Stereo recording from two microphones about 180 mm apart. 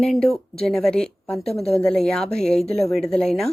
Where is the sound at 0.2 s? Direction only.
35° left (ahead or behind).